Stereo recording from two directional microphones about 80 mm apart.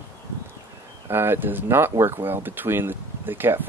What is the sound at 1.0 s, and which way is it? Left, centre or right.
Speech, right.